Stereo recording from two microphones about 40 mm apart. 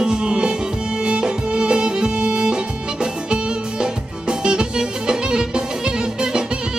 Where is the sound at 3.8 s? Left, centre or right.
Right.